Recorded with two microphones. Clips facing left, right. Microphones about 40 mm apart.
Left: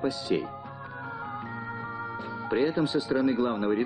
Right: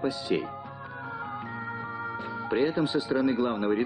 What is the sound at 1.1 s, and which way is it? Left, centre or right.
Music, centre.